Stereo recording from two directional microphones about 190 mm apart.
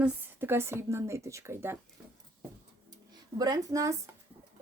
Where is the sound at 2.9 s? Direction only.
20° right (ahead or behind).